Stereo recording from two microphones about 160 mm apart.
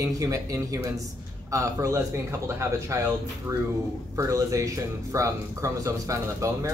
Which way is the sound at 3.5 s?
15° right (ahead or behind).